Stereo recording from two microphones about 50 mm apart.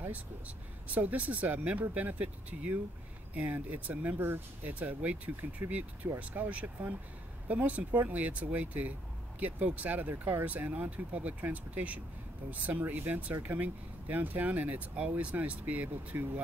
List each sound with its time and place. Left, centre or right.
0.9 s speech: right